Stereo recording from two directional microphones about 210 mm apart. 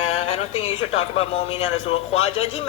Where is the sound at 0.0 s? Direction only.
30° left (ahead or behind).